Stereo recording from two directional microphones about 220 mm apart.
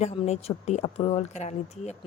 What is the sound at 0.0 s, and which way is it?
A woman's voice, 30° left (ahead or behind).